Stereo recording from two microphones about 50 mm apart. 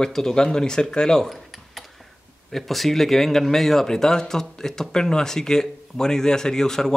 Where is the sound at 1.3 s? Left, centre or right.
Centre.